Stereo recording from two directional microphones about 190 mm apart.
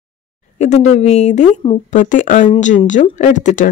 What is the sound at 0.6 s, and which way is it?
Speech, 35° left (ahead or behind).